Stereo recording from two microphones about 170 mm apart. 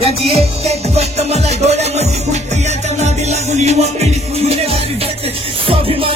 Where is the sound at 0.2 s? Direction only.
35° right (ahead or behind).